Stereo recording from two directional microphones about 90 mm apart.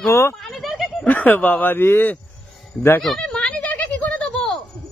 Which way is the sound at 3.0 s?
5° left (ahead or behind).